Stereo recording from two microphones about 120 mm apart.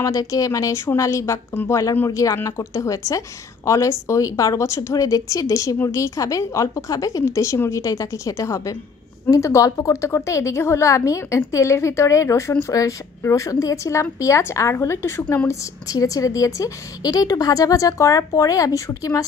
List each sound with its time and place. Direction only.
0.0 s a woman's voice: 30° left (ahead or behind)